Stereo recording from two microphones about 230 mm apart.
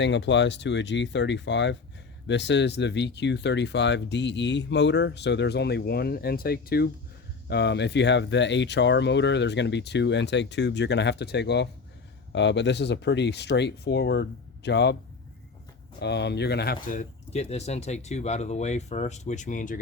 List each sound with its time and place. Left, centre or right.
0.0 s speech: left
16.0 s speech: left